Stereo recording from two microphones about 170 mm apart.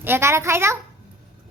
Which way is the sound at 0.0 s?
15° right (ahead or behind).